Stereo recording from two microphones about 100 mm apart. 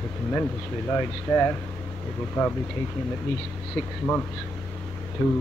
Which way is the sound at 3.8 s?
10° left (ahead or behind).